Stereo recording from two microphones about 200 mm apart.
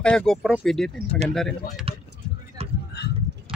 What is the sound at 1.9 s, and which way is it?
Vehicle, 30° right (ahead or behind).